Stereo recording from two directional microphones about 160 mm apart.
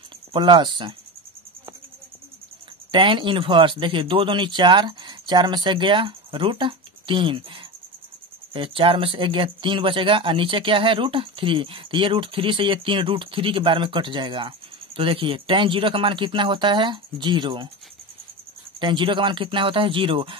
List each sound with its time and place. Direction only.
0.3 s speech: 30° right (ahead or behind)
2.9 s speech: 30° right (ahead or behind)
18.8 s speech: 30° right (ahead or behind)